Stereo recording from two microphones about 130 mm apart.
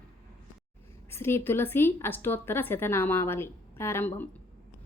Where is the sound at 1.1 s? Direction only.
20° left (ahead or behind).